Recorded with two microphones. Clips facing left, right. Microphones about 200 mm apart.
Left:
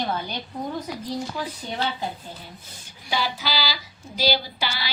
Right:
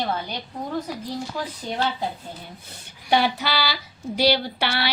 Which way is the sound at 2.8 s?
60° right (ahead or behind).